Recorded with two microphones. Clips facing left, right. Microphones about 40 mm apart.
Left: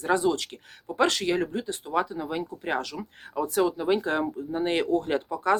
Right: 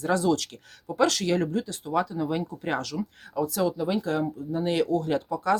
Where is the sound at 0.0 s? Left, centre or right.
Left.